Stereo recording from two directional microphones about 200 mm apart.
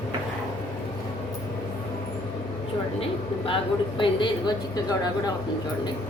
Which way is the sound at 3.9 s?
20° left (ahead or behind).